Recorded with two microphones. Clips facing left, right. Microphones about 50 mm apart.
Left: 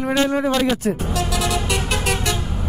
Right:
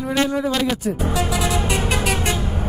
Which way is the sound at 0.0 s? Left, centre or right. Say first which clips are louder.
Left 2 dB; left.